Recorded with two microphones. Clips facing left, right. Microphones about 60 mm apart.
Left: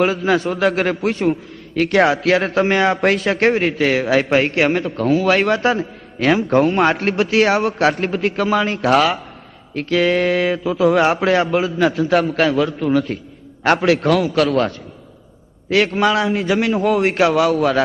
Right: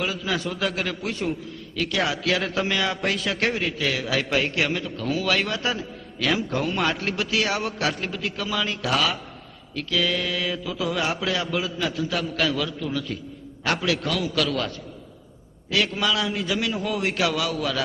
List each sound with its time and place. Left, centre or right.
0.0 s a man's voice: left
12.8 s a man's voice: left
13.7 s a man's voice: left